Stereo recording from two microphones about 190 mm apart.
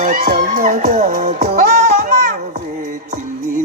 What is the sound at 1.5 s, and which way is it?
Music, 45° right (ahead or behind).